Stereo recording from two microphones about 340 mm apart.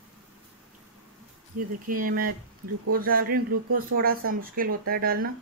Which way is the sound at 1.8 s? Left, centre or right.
Right.